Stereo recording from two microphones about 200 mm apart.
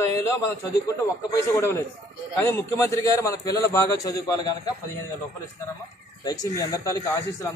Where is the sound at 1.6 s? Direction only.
10° left (ahead or behind).